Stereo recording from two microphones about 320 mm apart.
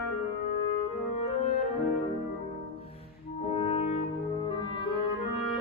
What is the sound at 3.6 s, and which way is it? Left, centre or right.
French horn, centre.